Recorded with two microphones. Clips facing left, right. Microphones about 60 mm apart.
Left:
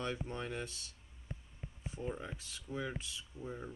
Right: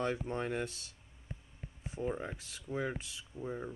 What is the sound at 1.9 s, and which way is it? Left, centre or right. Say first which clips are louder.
Speech: right 5 dB; right.